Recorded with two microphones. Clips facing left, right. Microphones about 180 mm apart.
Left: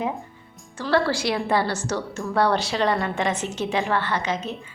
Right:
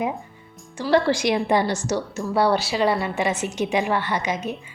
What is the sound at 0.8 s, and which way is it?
A woman's voice, 15° right (ahead or behind).